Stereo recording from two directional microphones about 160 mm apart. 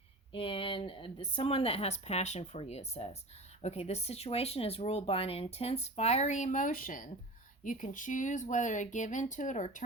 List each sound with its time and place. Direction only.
0.3 s speech: 35° left (ahead or behind); by 9.8 s 50° left (ahead or behind)